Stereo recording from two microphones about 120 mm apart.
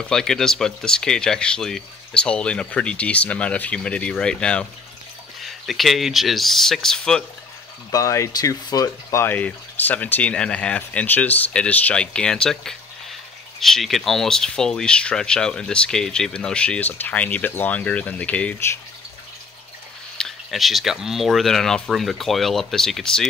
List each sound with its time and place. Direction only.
0.0 s speech: 5° left (ahead or behind)
7.9 s speech: 25° left (ahead or behind)
9.3 s speech: 15° left (ahead or behind)
20.2 s speech: centre (ahead or behind)